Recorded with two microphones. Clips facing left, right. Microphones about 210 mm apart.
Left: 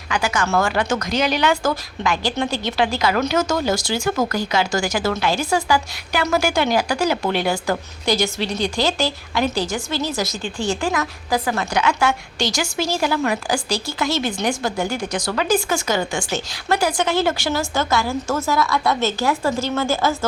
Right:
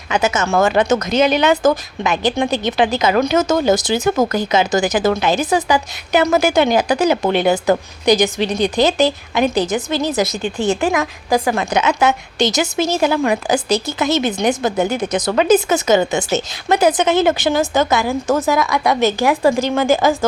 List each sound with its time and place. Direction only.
0.1 s a woman's voice: 20° right (ahead or behind)